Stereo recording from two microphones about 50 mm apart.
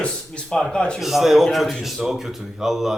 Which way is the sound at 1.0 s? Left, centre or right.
Centre.